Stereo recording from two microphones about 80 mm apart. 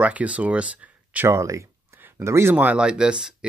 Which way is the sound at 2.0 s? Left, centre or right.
Right.